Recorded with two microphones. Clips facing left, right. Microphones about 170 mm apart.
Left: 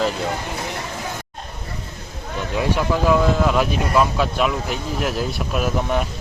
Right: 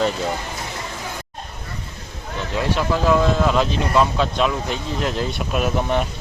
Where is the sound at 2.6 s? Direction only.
15° left (ahead or behind).